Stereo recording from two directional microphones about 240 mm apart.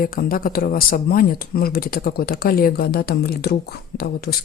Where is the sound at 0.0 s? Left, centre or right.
Left.